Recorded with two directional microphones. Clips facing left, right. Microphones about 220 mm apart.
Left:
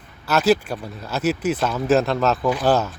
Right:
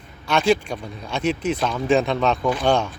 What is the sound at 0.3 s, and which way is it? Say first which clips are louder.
Speech: left 1 dB; 5° left (ahead or behind).